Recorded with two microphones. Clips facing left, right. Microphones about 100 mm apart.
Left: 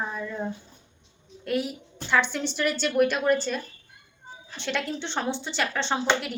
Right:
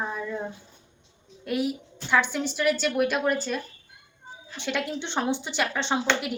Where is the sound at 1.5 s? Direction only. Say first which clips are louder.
Right 1 dB; 5° right (ahead or behind).